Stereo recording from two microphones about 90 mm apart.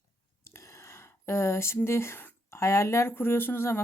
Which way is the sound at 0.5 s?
30° left (ahead or behind).